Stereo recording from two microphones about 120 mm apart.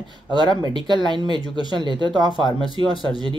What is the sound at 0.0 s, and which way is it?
Speech, 40° right (ahead or behind).